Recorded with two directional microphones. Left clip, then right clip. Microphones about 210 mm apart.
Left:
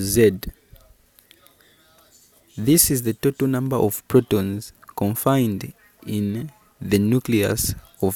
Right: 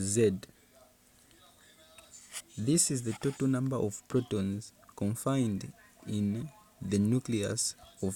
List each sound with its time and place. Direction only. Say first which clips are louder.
0.0 s speech: left 11 dB; 25° left (ahead or behind)
2.6 s speech: left 12 dB; 30° left (ahead or behind)